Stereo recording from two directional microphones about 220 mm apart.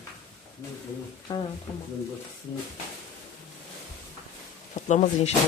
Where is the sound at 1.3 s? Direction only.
15° left (ahead or behind).